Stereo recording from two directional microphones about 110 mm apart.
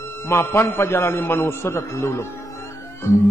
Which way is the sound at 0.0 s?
20° left (ahead or behind).